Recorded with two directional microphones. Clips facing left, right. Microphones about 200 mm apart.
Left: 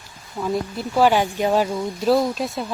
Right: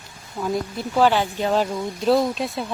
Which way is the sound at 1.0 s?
15° left (ahead or behind).